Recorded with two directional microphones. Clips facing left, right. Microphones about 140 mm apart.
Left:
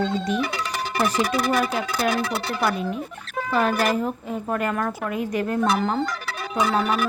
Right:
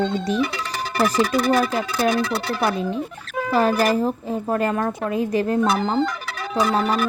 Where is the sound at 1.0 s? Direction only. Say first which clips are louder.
Right 4 dB; 35° right (ahead or behind).